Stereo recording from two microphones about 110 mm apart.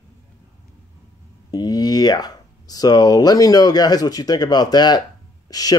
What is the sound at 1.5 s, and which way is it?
Speech, 40° left (ahead or behind).